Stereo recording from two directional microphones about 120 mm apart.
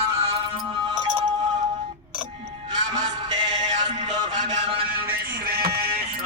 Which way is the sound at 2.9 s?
40° right (ahead or behind).